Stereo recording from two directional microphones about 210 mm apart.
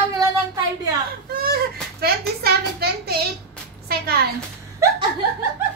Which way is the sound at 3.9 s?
50° right (ahead or behind).